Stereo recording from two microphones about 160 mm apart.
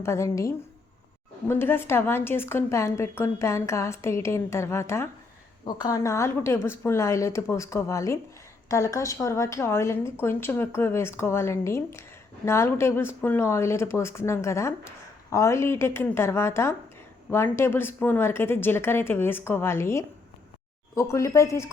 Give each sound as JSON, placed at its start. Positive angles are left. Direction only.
{"t": 0.0, "sound": "speech", "side_deg": 20}